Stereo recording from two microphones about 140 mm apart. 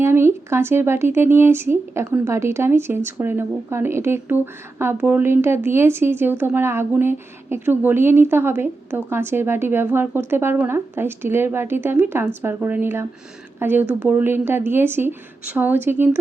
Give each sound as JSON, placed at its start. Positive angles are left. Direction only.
{"t": 0.0, "sound": "speech", "side_deg": -15}